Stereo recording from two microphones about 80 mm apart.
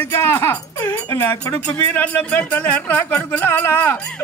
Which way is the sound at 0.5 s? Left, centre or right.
Left.